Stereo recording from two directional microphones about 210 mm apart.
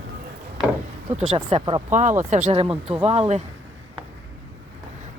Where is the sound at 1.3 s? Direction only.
20° right (ahead or behind).